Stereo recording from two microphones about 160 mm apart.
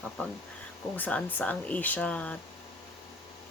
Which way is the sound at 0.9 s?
10° left (ahead or behind).